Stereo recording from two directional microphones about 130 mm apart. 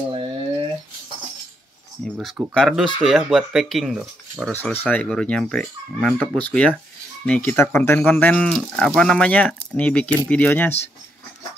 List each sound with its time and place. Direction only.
0.1 s a sound: 45° right (ahead or behind)
2.1 s speech: 10° right (ahead or behind)
2.5 s speech: 5° left (ahead or behind)
4.5 s speech: 10° left (ahead or behind)